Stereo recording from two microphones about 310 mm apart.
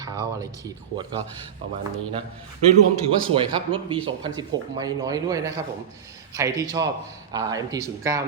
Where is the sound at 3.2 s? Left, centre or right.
Centre.